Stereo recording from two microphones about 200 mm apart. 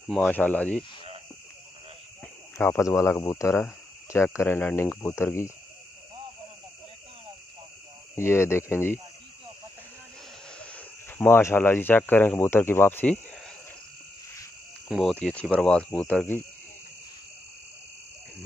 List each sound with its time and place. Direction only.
0.1 s speech: 5° left (ahead or behind)
2.5 s speech: 10° left (ahead or behind)
8.2 s speech: 15° left (ahead or behind)
10.6 s speech: 5° left (ahead or behind)
14.9 s speech: centre (ahead or behind)